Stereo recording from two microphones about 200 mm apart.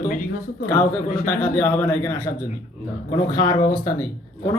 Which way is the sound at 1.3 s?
10° left (ahead or behind).